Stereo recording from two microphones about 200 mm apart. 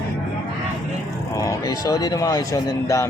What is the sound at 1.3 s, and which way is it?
Speech, 15° left (ahead or behind).